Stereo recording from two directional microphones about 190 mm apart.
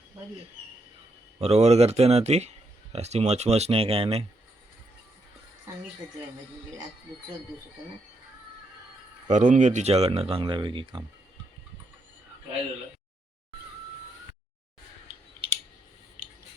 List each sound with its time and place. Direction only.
1.4 s speech: 35° right (ahead or behind)
9.2 s speech: 40° right (ahead or behind); by 11.0 s 25° right (ahead or behind)